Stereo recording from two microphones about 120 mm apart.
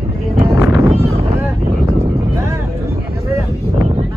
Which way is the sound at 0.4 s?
25° right (ahead or behind).